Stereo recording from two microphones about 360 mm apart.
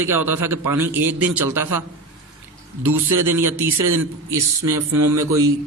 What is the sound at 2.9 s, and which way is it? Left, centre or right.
Speech, right.